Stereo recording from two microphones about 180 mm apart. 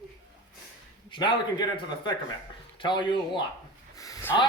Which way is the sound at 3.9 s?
20° left (ahead or behind).